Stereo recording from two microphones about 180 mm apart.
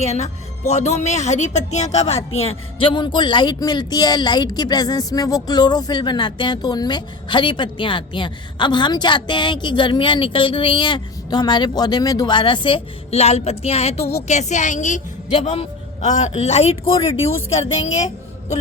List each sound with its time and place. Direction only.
0.0 s a woman's voice: 35° left (ahead or behind)